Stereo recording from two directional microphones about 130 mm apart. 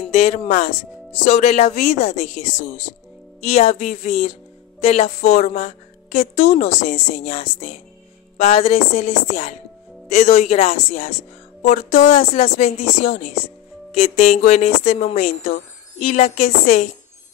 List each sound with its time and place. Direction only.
0.1 s a woman's voice: 65° left (ahead or behind)
1.2 s a woman's voice: 60° left (ahead or behind)
3.4 s a woman's voice: 55° left (ahead or behind)
11.6 s a woman's voice: 70° left (ahead or behind)